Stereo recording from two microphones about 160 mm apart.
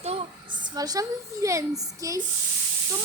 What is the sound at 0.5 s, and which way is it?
A woman's voice, 25° right (ahead or behind).